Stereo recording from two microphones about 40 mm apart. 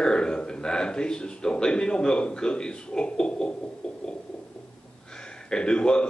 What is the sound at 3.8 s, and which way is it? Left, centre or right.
Heart murmur, left.